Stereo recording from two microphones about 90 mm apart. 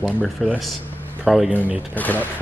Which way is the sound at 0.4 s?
Centre (ahead or behind).